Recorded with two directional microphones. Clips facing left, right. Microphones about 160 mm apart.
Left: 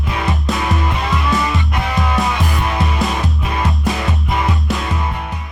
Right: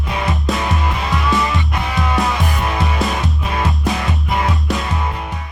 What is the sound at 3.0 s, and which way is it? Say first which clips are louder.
Music: even; centre (ahead or behind).